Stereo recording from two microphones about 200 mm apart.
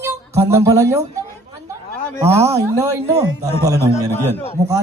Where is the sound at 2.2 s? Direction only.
15° right (ahead or behind).